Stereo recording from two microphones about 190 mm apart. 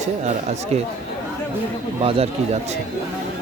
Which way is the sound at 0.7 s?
35° right (ahead or behind).